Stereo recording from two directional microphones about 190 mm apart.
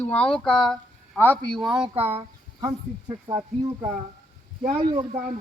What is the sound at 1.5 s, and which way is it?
Speech, centre (ahead or behind).